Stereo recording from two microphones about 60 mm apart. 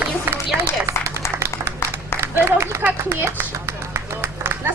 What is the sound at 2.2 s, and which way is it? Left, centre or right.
Speech, right.